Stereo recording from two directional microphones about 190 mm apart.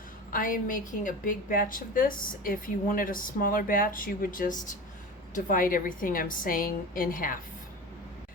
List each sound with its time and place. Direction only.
0.3 s a woman's voice: 45° left (ahead or behind)